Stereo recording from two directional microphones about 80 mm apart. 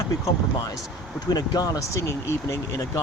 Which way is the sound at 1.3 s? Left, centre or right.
Left.